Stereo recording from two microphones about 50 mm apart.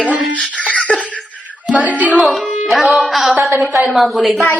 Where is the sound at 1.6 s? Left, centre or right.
Right.